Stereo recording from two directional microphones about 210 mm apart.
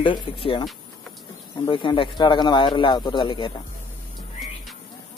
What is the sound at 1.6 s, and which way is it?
Speech, 25° left (ahead or behind).